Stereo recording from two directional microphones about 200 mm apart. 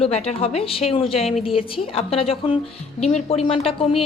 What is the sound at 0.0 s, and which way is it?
A woman's voice, 30° left (ahead or behind).